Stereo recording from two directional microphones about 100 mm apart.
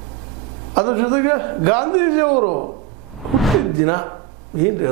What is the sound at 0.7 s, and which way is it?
Speech, 20° right (ahead or behind).